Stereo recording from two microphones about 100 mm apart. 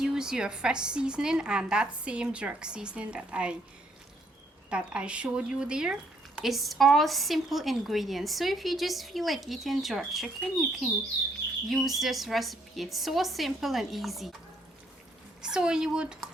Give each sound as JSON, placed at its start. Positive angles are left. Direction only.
{"t": 0.0, "sound": "a woman's voice", "side_deg": -5}
{"t": 4.7, "sound": "speech", "side_deg": -10}
{"t": 15.4, "sound": "a woman's voice", "side_deg": -10}